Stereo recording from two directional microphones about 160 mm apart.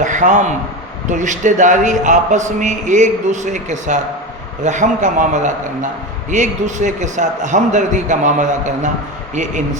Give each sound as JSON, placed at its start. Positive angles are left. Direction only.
{"t": 0.0, "sound": "a man's voice", "side_deg": -50}